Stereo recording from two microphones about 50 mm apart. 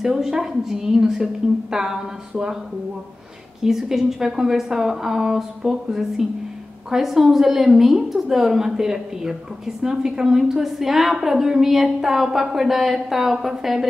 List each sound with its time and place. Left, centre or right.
0.0 s a woman's voice: centre
3.6 s a woman's voice: centre